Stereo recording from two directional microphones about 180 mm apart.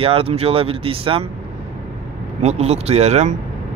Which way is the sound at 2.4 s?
35° right (ahead or behind).